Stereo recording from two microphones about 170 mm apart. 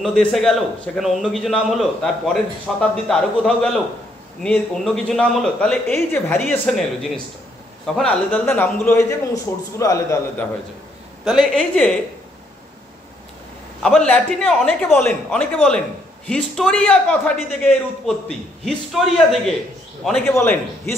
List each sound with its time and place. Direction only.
0.0 s a man's voice: 5° left (ahead or behind); by 10.0 s 20° left (ahead or behind)
11.2 s a man's voice: centre (ahead or behind)
13.8 s a man's voice: 5° left (ahead or behind)